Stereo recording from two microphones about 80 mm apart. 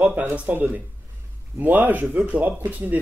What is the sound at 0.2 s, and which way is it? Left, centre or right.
Speech, right.